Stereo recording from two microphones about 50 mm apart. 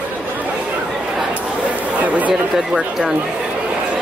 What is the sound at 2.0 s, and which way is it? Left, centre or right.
Speech, right.